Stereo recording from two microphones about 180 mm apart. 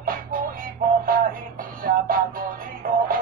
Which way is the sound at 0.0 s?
55° right (ahead or behind).